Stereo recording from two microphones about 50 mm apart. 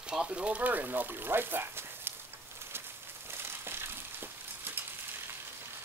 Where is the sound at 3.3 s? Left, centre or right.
Right.